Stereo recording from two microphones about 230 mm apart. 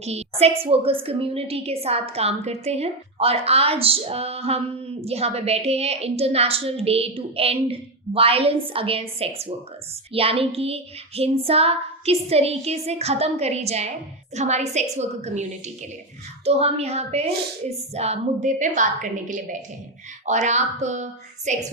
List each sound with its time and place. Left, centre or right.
0.0 s a woman's voice: right